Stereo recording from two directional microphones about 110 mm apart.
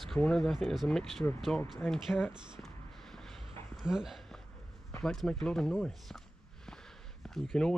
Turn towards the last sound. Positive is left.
turn(degrees=5)  # may be behind; listen again after turning